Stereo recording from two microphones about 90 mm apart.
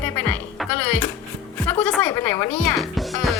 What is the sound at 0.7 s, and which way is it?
Music, 15° left (ahead or behind).